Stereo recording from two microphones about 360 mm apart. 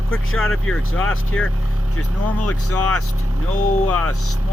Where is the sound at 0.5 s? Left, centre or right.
Centre.